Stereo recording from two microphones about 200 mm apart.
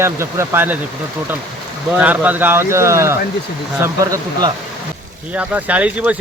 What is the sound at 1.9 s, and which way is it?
Speech, 10° right (ahead or behind).